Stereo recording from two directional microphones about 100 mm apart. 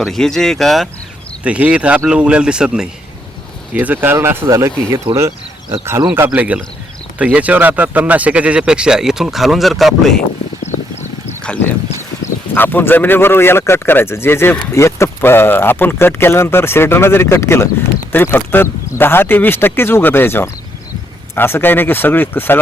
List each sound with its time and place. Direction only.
0.0 s speech: 5° left (ahead or behind)
1.5 s speech: 15° right (ahead or behind); by 4.7 s 30° right (ahead or behind)
5.1 s speech: 15° right (ahead or behind); by 10.2 s centre (ahead or behind)
11.4 s speech: 15° left (ahead or behind)